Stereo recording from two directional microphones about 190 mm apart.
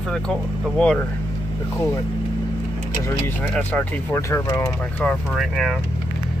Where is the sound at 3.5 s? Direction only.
10° left (ahead or behind).